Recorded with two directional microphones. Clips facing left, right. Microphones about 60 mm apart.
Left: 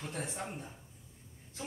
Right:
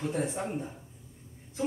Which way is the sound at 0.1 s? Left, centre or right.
Right.